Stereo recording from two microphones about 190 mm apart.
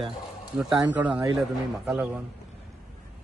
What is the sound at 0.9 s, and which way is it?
A man's voice, 10° right (ahead or behind).